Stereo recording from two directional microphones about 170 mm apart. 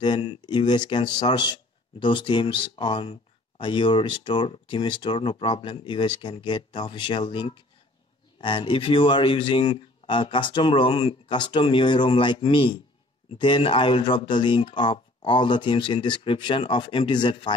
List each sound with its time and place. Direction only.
0.0 s speech: 30° left (ahead or behind)